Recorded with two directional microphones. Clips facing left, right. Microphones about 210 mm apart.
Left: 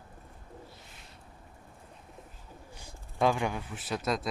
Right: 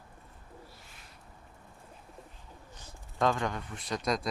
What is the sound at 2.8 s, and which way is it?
Speech, 10° left (ahead or behind).